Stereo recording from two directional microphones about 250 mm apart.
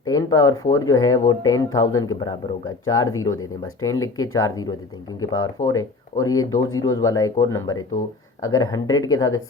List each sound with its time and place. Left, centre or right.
0.0 s speech: centre